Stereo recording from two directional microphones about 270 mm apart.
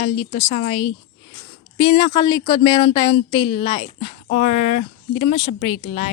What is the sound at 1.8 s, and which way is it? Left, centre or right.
Speech, centre.